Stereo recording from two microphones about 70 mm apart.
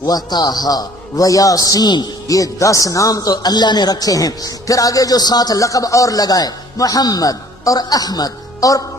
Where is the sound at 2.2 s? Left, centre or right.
Left.